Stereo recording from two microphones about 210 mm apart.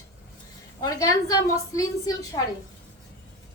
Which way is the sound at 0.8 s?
15° left (ahead or behind).